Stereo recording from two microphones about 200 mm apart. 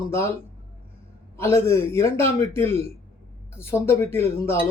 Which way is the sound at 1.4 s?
15° left (ahead or behind).